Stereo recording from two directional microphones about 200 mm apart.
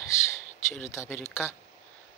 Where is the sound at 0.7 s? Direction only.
15° left (ahead or behind).